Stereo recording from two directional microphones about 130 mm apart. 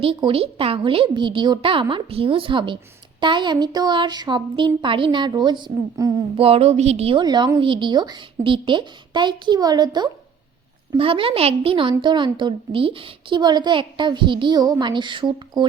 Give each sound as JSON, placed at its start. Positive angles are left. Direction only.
{"t": 0.0, "sound": "a woman's voice", "side_deg": -45}
{"t": 6.3, "sound": "a woman's voice", "side_deg": -50}
{"t": 7.3, "sound": "a woman's voice", "side_deg": -35}
{"t": 10.9, "sound": "a woman's voice", "side_deg": -45}